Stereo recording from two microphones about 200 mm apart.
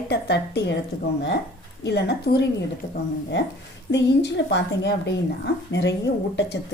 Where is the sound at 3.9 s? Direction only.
60° left (ahead or behind).